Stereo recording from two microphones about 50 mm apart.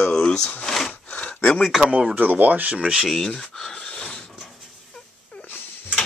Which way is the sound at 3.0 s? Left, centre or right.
Centre.